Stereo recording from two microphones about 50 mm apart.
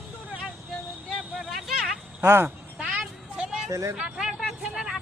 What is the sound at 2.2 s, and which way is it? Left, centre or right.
Speech, right.